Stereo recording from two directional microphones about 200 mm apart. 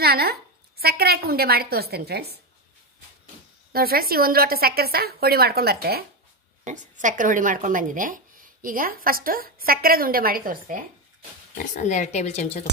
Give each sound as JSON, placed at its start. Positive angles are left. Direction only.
{"t": 0.0, "sound": "a woman's voice", "side_deg": -50}
{"t": 3.7, "sound": "speech", "side_deg": -50}
{"t": 6.6, "sound": "speech", "side_deg": -40}
{"t": 11.5, "sound": "speech", "side_deg": 35}